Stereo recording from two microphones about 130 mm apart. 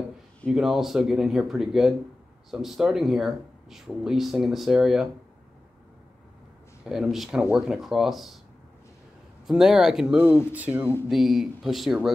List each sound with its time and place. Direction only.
0.5 s speech: centre (ahead or behind)
6.8 s speech: 5° right (ahead or behind)
9.5 s speech: 5° right (ahead or behind)
11.1 s speech: centre (ahead or behind)